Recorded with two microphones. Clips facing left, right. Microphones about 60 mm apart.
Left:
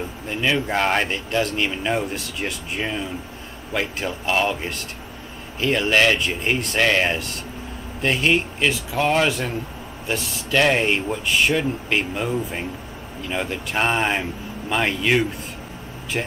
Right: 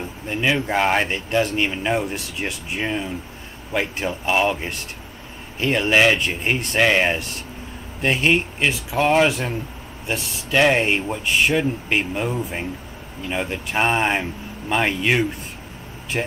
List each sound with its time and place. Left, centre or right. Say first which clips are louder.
0.3 s speech: right 1 dB; centre
5.6 s speech: right 1 dB; centre
10.0 s speech: even; centre